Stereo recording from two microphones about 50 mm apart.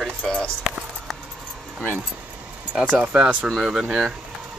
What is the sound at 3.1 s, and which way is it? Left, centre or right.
Speech, centre.